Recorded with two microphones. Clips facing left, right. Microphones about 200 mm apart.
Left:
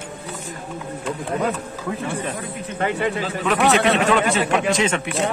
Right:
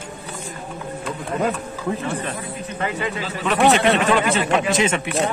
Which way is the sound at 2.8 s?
55° left (ahead or behind).